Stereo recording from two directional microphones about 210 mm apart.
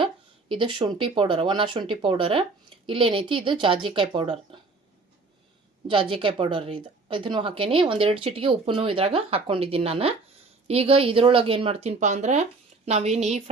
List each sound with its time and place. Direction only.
0.0 s a woman's voice: 25° right (ahead or behind)
5.9 s a woman's voice: 25° right (ahead or behind)